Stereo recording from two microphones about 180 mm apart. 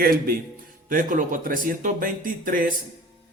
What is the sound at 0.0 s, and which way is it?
Speech, 55° right (ahead or behind).